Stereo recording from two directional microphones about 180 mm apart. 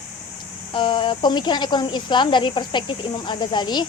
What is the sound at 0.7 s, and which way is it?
Speech, 25° left (ahead or behind).